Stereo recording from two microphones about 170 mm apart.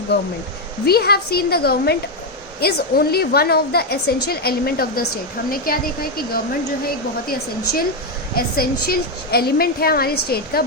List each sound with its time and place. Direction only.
0.9 s a woman's voice: 65° left (ahead or behind)